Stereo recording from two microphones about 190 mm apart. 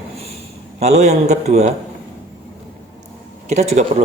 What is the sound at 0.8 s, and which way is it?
Speech, 35° right (ahead or behind).